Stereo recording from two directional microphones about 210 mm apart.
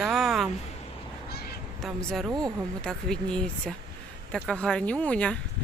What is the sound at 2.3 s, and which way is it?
Speech, 20° right (ahead or behind).